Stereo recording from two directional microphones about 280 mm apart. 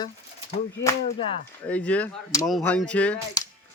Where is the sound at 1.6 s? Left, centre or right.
Centre.